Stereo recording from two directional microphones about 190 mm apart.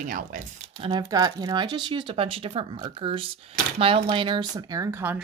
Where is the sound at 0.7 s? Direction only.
25° right (ahead or behind).